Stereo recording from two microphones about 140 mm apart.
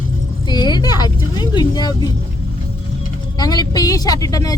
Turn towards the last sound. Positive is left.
turn(degrees=25)  # may be behind; listen again after turning